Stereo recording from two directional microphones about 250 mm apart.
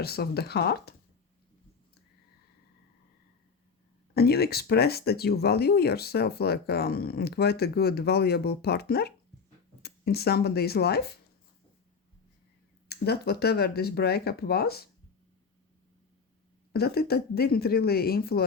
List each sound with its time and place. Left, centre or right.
0.0 s speech: left
4.1 s speech: left
12.9 s speech: left
16.7 s speech: left